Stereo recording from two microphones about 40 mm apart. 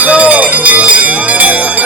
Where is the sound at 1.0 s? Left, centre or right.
Right.